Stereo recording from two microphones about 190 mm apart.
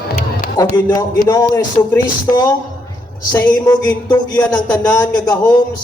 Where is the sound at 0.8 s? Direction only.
20° left (ahead or behind).